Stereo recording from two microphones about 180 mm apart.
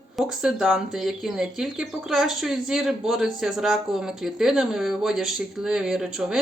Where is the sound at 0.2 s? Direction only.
5° right (ahead or behind).